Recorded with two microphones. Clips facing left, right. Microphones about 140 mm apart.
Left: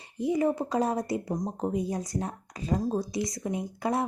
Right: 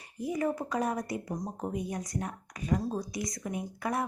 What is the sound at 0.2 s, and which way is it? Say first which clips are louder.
Speech: left 5 dB; 25° left (ahead or behind).